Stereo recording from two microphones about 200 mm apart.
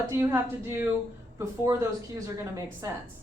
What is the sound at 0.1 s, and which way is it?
A woman's voice, 15° right (ahead or behind).